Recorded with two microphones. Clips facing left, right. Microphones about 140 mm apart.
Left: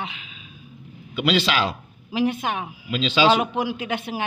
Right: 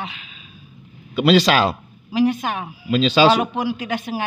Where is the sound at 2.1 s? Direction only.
20° left (ahead or behind).